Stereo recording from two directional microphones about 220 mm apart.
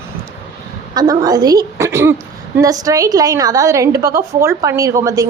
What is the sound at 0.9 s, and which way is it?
A woman's voice, 15° right (ahead or behind).